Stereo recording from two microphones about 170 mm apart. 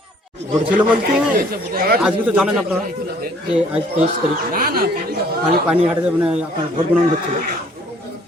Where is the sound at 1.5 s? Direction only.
60° right (ahead or behind).